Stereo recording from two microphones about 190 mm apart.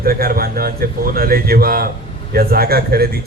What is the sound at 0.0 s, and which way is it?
A man's voice, 50° right (ahead or behind).